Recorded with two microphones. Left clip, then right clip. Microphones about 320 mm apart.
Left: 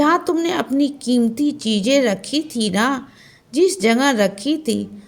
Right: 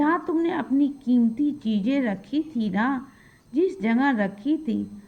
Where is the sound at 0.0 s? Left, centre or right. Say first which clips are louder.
Left 6 dB; right.